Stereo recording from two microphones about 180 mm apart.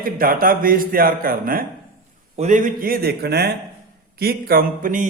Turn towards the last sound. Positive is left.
turn(degrees=-50)  # may be behind; listen again after turning